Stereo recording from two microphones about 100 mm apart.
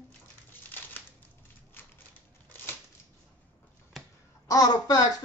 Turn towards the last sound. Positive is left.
turn(degrees=45)  # may be behind; listen again after turning